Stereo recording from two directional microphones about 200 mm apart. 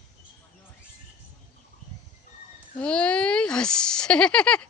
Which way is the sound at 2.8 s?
5° left (ahead or behind).